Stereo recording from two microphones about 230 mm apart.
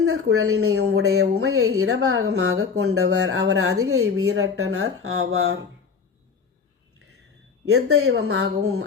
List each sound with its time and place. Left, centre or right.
0.0 s speech: right
7.7 s speech: right